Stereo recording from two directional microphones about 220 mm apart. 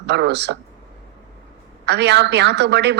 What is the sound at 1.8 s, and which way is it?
A woman's voice, 50° right (ahead or behind).